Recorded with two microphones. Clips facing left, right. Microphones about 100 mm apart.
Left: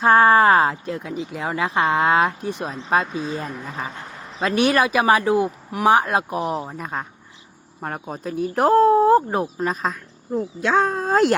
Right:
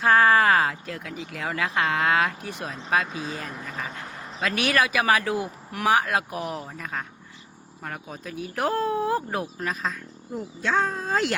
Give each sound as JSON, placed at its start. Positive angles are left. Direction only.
{"t": 0.0, "sound": "speech", "side_deg": 30}
{"t": 7.8, "sound": "speech", "side_deg": 40}
{"t": 9.8, "sound": "speech", "side_deg": 50}